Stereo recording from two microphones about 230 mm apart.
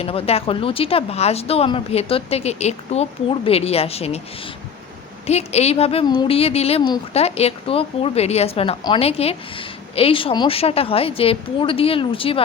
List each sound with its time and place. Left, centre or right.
0.0 s speech: left
5.2 s speech: left